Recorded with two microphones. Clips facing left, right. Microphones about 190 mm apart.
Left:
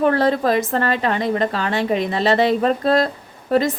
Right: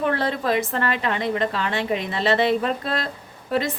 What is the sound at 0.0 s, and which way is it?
A woman's voice, 40° left (ahead or behind).